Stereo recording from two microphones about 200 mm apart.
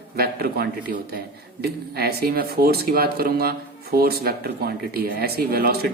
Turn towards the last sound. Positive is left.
turn(degrees=-50)  # may be behind; listen again after turning